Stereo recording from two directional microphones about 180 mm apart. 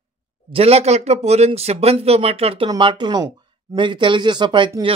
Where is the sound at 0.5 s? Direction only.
35° right (ahead or behind).